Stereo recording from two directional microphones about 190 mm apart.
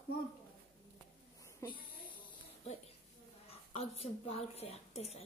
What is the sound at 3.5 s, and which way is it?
A woman's voice, 30° left (ahead or behind).